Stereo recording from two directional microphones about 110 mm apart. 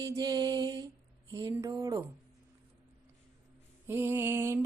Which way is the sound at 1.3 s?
30° right (ahead or behind).